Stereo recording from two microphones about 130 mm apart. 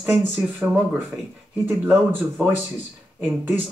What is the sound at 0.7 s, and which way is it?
Speech, 5° right (ahead or behind).